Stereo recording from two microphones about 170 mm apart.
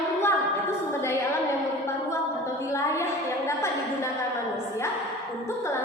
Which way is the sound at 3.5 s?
15° left (ahead or behind).